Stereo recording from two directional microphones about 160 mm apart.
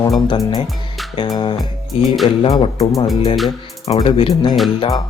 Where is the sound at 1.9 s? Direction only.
Centre (ahead or behind).